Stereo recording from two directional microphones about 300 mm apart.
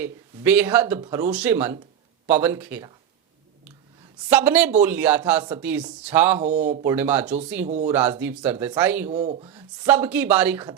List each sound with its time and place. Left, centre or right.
0.0 s speech: centre
4.3 s speech: centre
6.4 s speech: right
6.8 s speech: centre
9.0 s speech: right
9.5 s speech: centre